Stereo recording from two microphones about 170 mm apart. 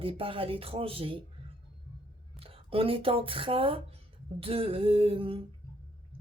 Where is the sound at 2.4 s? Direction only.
35° right (ahead or behind).